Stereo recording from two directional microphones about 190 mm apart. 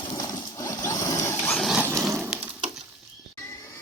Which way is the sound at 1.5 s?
Centre (ahead or behind).